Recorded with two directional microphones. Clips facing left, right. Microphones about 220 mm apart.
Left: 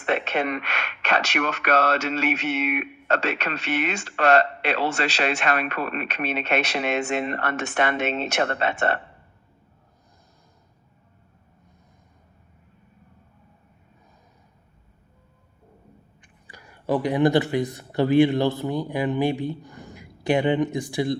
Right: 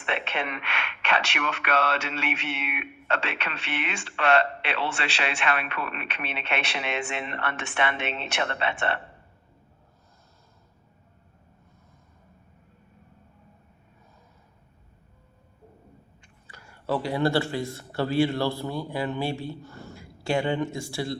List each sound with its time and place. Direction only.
0.0 s speech: 40° left (ahead or behind)
16.5 s speech: 15° left (ahead or behind)